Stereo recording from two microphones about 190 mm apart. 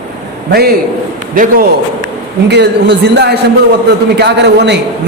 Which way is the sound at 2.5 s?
65° right (ahead or behind).